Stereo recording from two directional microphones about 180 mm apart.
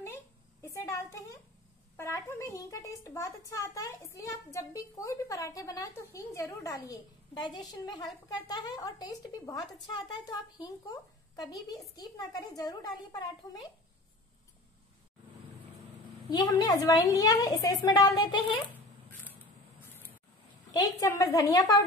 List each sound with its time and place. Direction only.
0.0 s a sound: 15° left (ahead or behind)
2.0 s a woman's voice: 15° left (ahead or behind)
16.3 s a woman's voice: 20° left (ahead or behind)
20.7 s a woman's voice: 20° left (ahead or behind)